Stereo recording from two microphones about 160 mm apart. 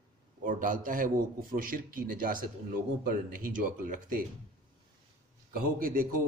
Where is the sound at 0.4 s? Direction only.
60° right (ahead or behind).